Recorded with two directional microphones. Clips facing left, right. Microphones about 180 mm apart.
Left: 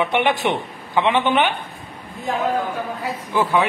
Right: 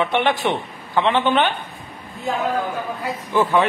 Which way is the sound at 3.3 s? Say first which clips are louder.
Right 2 dB; 10° left (ahead or behind).